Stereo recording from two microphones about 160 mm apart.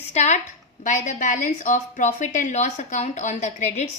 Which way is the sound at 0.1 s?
45° left (ahead or behind).